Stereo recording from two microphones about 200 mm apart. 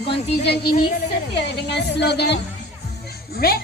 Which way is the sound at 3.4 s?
50° left (ahead or behind).